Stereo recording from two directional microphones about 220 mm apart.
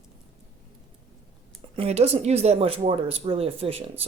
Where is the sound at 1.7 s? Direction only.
25° right (ahead or behind).